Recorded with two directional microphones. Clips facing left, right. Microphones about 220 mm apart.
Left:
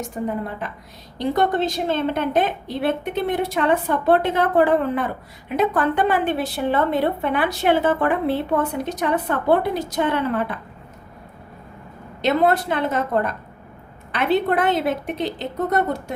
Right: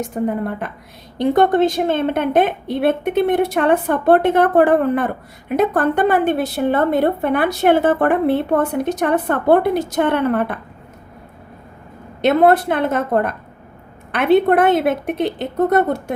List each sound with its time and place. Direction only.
0.3 s a woman's voice: 55° right (ahead or behind)
12.2 s a woman's voice: 55° right (ahead or behind)